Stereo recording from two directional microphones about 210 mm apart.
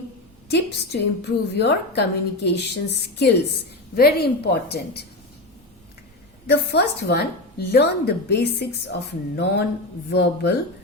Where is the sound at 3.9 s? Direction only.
50° left (ahead or behind).